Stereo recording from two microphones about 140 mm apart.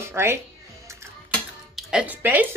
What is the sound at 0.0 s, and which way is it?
Speech, 20° right (ahead or behind).